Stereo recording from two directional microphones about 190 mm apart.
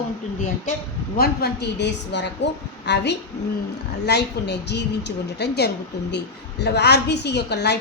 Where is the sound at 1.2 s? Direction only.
60° left (ahead or behind).